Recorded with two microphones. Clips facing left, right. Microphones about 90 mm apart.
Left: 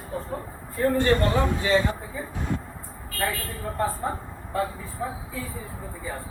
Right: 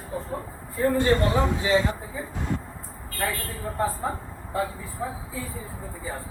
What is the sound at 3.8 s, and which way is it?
Speech, 10° right (ahead or behind).